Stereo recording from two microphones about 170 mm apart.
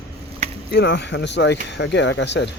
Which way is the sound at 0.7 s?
85° left.